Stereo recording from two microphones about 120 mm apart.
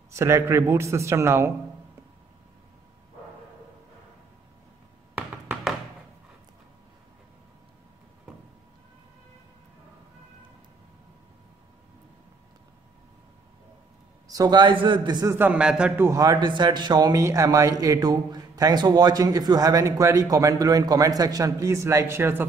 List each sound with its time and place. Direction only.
0.1 s a man's voice: 25° right (ahead or behind)
5.5 s music: centre (ahead or behind)
14.2 s speech: 30° right (ahead or behind)
15.3 s a man's voice: 10° right (ahead or behind)
16.0 s speech: 25° right (ahead or behind)